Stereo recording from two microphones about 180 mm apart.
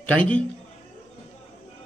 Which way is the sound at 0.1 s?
5° left (ahead or behind).